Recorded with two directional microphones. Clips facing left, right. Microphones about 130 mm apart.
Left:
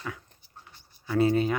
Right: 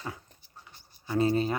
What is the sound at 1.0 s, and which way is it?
Speech, 30° right (ahead or behind).